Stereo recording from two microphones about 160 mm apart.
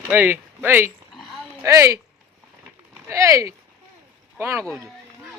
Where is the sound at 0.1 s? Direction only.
10° right (ahead or behind).